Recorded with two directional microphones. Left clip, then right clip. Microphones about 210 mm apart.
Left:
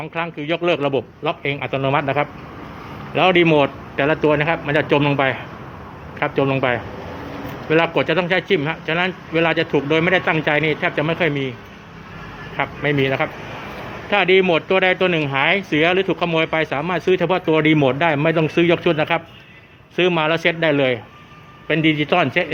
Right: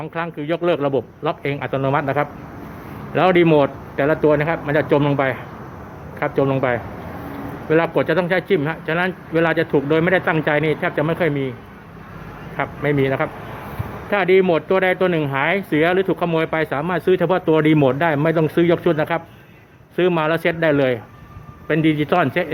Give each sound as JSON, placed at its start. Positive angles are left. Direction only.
{"t": 0.0, "sound": "speech", "side_deg": 0}
{"t": 12.5, "sound": "speech", "side_deg": 0}